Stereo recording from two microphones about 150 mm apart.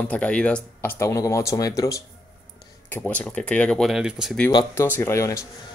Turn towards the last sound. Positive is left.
turn(degrees=20)  # may be behind; listen again after turning